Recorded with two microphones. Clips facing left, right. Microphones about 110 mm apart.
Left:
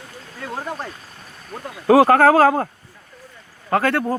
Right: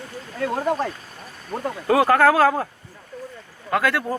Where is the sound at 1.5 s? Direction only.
40° right (ahead or behind).